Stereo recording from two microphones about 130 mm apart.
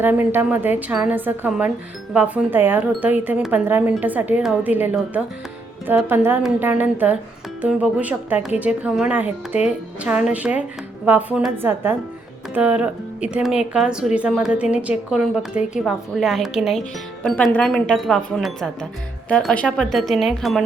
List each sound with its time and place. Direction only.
0.0 s speech: 15° right (ahead or behind)